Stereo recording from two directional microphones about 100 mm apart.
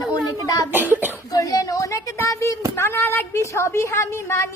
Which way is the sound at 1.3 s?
35° left (ahead or behind).